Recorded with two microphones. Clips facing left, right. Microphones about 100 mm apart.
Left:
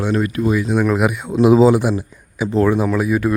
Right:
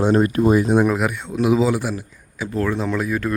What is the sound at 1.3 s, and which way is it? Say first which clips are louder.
Speech: left 7 dB; 30° left (ahead or behind).